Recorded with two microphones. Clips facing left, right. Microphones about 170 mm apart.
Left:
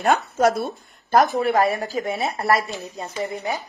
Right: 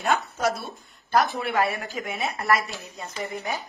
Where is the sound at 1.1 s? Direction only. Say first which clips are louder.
Left 5 dB; 40° left (ahead or behind).